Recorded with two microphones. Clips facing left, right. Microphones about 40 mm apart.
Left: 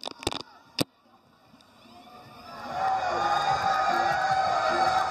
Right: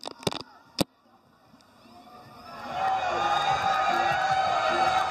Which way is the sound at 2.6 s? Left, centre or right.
Right.